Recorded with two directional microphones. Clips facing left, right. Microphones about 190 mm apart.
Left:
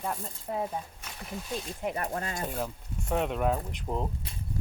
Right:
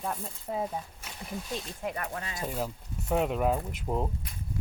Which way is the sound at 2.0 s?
45° left (ahead or behind).